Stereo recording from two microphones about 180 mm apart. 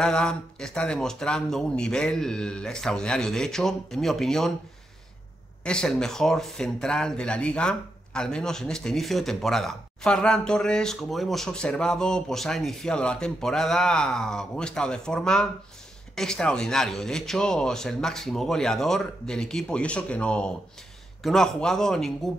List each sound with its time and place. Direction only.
0.0 s speech: 5° left (ahead or behind)
5.6 s speech: 5° left (ahead or behind)